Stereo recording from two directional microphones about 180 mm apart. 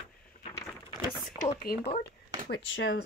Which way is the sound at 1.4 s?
45° left (ahead or behind).